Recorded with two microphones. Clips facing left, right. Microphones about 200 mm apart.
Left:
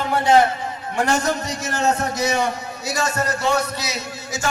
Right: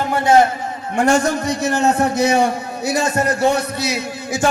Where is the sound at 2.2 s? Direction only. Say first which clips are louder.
Right 3 dB; 55° right (ahead or behind).